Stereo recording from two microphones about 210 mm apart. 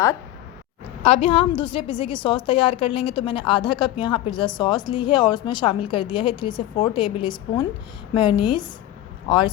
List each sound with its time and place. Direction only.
1.0 s a woman's voice: 30° left (ahead or behind)